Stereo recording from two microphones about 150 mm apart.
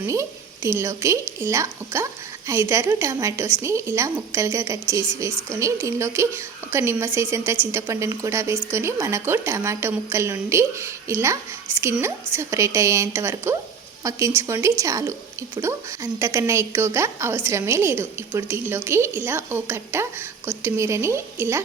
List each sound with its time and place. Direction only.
0.1 s a woman's voice: 20° right (ahead or behind)